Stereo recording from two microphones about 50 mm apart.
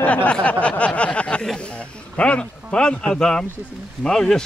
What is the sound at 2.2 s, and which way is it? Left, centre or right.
Speech, left.